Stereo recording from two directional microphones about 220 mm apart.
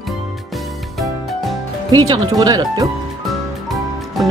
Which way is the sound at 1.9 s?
20° right (ahead or behind).